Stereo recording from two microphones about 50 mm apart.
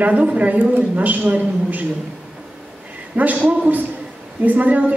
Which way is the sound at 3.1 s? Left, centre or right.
Right.